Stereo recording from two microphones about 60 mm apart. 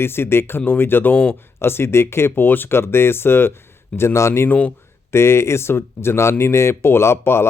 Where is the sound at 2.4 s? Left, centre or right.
Left.